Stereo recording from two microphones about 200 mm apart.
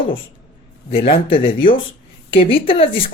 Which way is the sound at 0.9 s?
30° left (ahead or behind).